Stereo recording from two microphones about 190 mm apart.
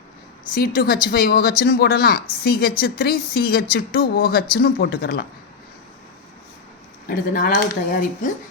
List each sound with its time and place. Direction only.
0.5 s a woman's voice: 55° left (ahead or behind)
7.1 s a woman's voice: 45° left (ahead or behind)